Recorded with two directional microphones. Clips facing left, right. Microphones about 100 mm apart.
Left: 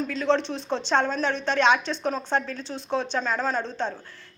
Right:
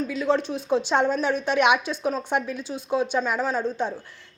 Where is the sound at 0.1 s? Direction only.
5° right (ahead or behind).